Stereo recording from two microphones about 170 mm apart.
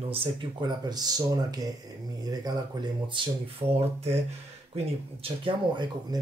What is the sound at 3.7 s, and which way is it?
Speech, 35° right (ahead or behind).